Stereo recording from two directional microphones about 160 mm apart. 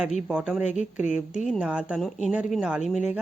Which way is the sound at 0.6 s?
45° left (ahead or behind).